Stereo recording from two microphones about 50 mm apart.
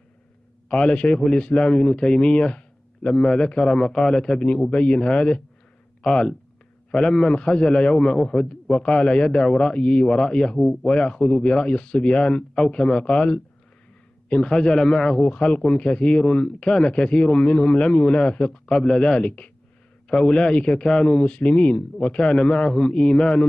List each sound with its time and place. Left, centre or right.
0.7 s a man's voice: centre